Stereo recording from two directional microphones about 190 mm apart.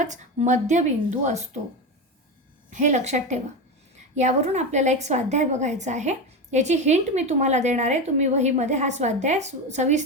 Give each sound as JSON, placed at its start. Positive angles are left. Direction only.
{"t": 0.0, "sound": "a woman's voice", "side_deg": -40}
{"t": 2.6, "sound": "a woman's voice", "side_deg": -40}